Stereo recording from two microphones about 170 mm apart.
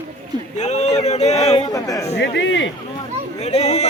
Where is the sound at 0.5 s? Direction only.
40° left (ahead or behind).